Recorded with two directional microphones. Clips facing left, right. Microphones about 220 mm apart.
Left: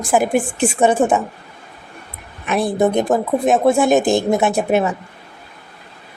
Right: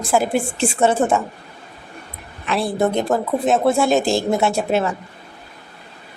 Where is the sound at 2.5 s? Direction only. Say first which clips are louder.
Left 3 dB; 15° left (ahead or behind).